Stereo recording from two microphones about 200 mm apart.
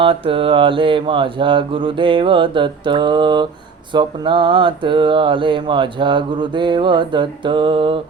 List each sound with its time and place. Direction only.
0.0 s mantra: 25° right (ahead or behind)